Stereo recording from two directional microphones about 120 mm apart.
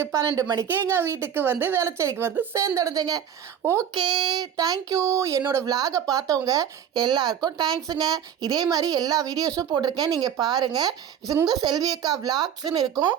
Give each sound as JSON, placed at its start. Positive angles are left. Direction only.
{"t": 0.0, "sound": "a woman's voice", "side_deg": -25}
{"t": 3.6, "sound": "a woman's voice", "side_deg": -25}
{"t": 3.9, "sound": "speech", "side_deg": -40}